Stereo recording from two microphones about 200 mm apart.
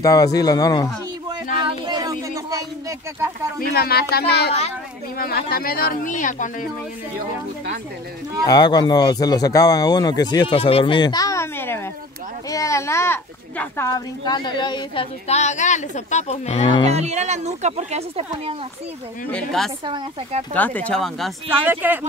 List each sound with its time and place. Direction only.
0.0 s speech: 15° left (ahead or behind)
1.7 s a sound: 20° right (ahead or behind)
3.7 s speech: 50° left (ahead or behind)
8.5 s speech: 20° left (ahead or behind)
16.8 s speech: 35° right (ahead or behind)
19.3 s a woman's voice: centre (ahead or behind)
19.8 s speech: 25° right (ahead or behind)
20.5 s speech: 5° left (ahead or behind)
21.5 s speech: 10° right (ahead or behind)